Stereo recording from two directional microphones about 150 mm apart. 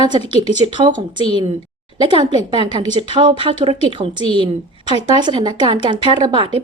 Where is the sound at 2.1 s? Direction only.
45° left (ahead or behind).